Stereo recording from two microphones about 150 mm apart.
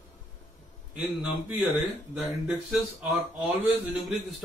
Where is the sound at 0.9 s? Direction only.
10° right (ahead or behind).